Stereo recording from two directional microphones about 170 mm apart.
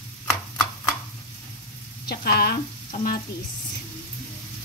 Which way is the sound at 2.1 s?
65° left (ahead or behind).